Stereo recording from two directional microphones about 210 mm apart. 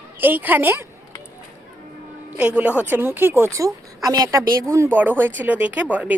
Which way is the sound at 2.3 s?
5° right (ahead or behind).